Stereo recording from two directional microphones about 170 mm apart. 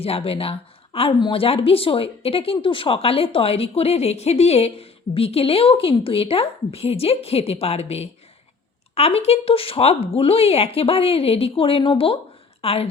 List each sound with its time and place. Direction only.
0.0 s a woman's voice: 35° left (ahead or behind)